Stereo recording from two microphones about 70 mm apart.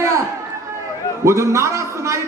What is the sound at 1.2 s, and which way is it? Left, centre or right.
Speech, right.